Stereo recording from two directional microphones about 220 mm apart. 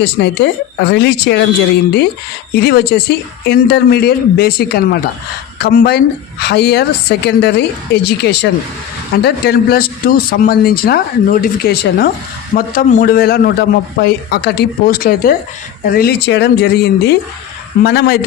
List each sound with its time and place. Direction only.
0.0 s speech: 50° left (ahead or behind)